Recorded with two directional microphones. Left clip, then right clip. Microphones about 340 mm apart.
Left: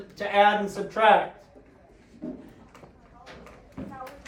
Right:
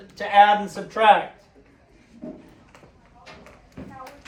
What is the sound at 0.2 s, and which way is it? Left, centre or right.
Speech, right.